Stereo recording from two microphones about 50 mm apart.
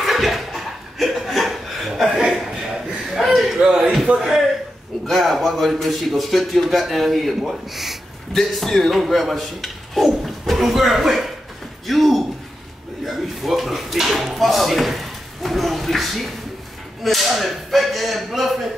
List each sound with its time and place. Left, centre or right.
0.0 s chuckle: centre
4.1 s speech: right
5.0 s a man's voice: centre
13.0 s a sound: centre
17.0 s a man's voice: centre